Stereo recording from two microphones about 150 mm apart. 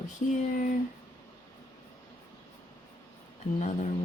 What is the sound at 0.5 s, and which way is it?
Speech, 65° left (ahead or behind).